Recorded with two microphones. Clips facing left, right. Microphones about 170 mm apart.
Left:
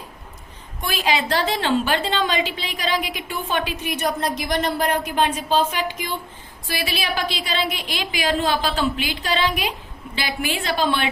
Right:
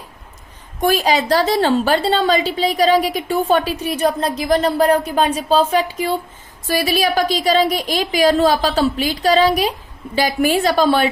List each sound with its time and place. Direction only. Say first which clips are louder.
0.8 s a woman's voice: right 7 dB; 40° right (ahead or behind)